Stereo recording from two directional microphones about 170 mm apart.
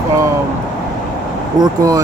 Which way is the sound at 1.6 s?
20° right (ahead or behind).